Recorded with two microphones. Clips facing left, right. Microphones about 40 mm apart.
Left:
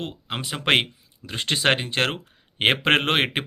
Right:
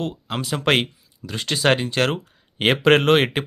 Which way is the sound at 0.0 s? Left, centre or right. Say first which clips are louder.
Right 4 dB; left.